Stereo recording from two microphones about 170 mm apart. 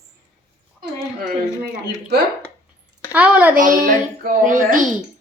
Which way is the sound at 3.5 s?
55° right (ahead or behind).